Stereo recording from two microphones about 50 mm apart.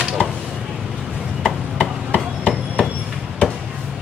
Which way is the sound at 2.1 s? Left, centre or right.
Right.